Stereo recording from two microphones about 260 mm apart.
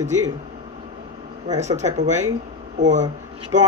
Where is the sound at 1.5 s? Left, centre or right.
Right.